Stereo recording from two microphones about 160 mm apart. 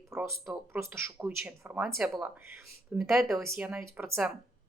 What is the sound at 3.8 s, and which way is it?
Speech, 15° right (ahead or behind).